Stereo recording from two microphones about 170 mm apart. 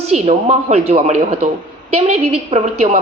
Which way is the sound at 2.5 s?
40° right (ahead or behind).